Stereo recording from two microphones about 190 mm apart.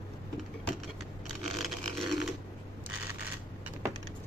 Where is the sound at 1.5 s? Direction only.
Centre (ahead or behind).